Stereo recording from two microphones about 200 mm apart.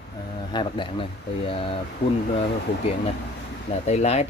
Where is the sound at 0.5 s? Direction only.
25° left (ahead or behind).